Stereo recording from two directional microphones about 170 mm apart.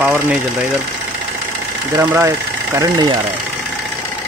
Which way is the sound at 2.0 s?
15° right (ahead or behind).